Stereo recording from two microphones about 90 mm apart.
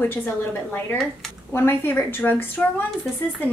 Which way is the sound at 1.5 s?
25° left (ahead or behind).